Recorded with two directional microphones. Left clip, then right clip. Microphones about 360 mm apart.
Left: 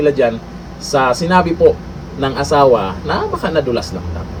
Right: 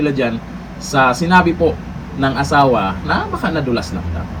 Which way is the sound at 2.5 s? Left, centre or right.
Centre.